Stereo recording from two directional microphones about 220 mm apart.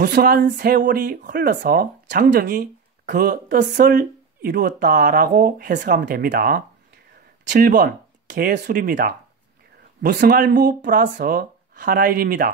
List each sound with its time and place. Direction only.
0.0 s speech: 40° right (ahead or behind)
10.1 s speech: 45° right (ahead or behind)